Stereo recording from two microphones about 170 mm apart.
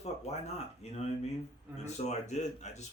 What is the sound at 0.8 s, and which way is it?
Speech, 40° left (ahead or behind).